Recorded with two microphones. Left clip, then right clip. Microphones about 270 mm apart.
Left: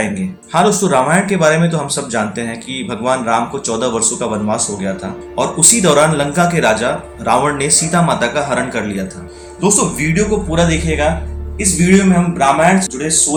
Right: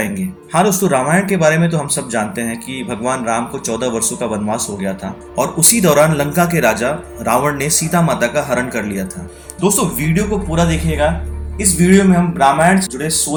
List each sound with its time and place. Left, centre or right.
0.5 s speech: right